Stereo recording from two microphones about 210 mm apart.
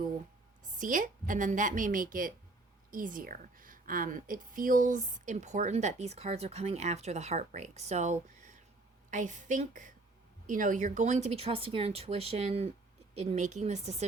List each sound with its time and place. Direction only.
0.6 s a woman's voice: 40° right (ahead or behind)